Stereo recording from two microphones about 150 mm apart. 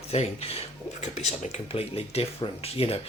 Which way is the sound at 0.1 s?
45° left (ahead or behind).